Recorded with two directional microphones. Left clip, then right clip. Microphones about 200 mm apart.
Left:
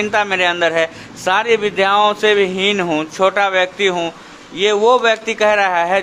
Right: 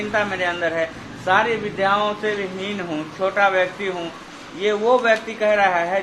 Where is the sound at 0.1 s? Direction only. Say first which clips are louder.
Left 4 dB; 45° left (ahead or behind).